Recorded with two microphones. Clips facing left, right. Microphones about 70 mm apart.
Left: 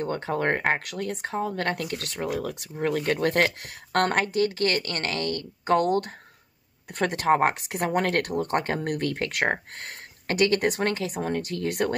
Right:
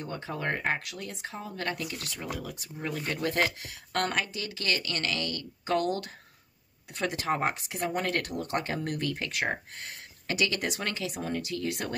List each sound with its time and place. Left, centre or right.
0.0 s speech: left
6.9 s speech: left